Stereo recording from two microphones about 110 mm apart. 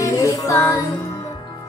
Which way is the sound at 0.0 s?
30° left (ahead or behind).